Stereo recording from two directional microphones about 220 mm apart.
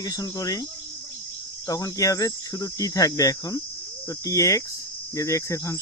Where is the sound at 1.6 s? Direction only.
15° left (ahead or behind).